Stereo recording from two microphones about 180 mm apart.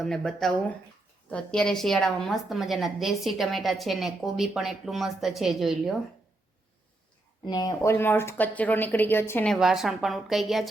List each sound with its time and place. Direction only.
0.0 s a woman's voice: centre (ahead or behind)
7.4 s speech: 20° left (ahead or behind)
9.5 s a woman's voice: centre (ahead or behind)